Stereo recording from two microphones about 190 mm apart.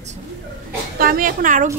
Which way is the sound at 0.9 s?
50° right (ahead or behind).